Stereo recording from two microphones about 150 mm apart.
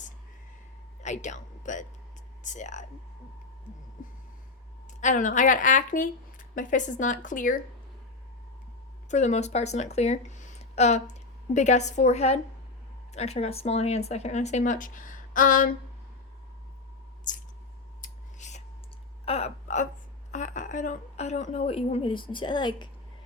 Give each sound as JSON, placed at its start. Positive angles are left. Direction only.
{"t": 1.0, "sound": "speech", "side_deg": 55}
{"t": 4.9, "sound": "a woman's voice", "side_deg": 55}
{"t": 9.0, "sound": "a woman's voice", "side_deg": 50}
{"t": 18.0, "sound": "scissors", "side_deg": 50}
{"t": 19.2, "sound": "a woman's voice", "side_deg": 45}